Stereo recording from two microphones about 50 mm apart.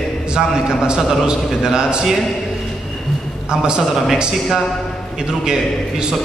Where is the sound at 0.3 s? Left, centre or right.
Centre.